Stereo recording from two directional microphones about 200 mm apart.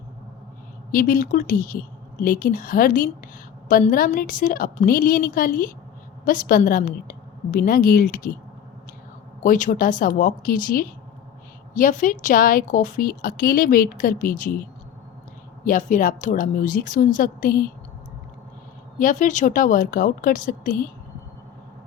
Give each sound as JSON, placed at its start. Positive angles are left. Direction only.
{"t": 0.9, "sound": "a woman's voice", "side_deg": 45}
{"t": 9.4, "sound": "a woman's voice", "side_deg": 40}
{"t": 15.6, "sound": "a woman's voice", "side_deg": 40}
{"t": 18.9, "sound": "a woman's voice", "side_deg": 40}